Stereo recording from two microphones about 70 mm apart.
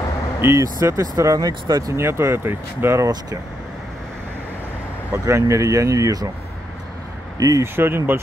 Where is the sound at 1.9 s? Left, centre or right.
Right.